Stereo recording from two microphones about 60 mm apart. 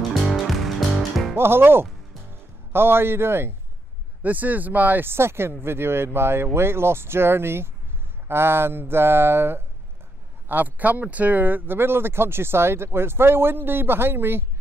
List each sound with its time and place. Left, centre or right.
0.1 s music: centre
1.3 s speech: right
4.2 s speech: right
10.5 s speech: right